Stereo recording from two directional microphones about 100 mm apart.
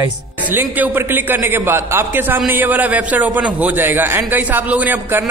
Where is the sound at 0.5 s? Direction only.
20° right (ahead or behind).